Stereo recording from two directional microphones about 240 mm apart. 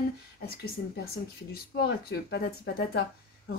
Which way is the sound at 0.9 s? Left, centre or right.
Left.